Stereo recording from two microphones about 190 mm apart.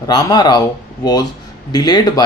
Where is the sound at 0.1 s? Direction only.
20° left (ahead or behind).